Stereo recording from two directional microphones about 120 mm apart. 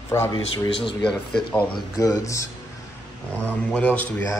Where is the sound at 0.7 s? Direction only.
45° left (ahead or behind).